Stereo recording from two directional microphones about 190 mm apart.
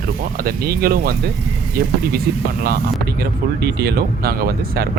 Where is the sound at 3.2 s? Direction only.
55° right (ahead or behind).